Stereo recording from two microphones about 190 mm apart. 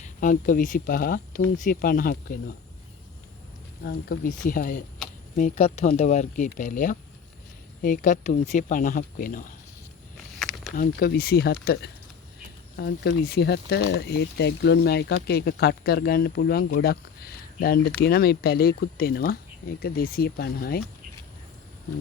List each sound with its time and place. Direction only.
0.0 s speech: 45° left (ahead or behind)
3.8 s speech: 50° left (ahead or behind)
10.8 s speech: 50° left (ahead or behind)